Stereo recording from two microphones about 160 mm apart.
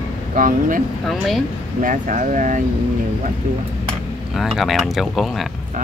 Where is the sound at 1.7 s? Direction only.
55° right (ahead or behind).